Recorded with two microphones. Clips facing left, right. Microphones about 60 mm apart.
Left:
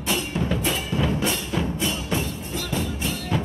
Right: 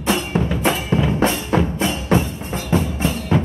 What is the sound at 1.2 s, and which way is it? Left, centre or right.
Music, right.